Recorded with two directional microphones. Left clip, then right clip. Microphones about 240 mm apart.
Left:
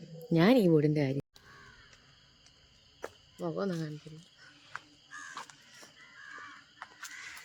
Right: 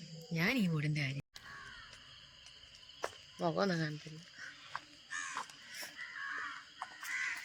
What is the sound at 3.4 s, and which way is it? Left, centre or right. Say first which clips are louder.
Speech: right 1 dB; centre.